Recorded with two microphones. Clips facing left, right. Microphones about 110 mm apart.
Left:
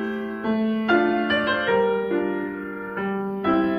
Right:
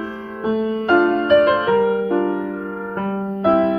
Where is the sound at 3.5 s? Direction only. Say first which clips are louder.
Right 5 dB; 40° right (ahead or behind).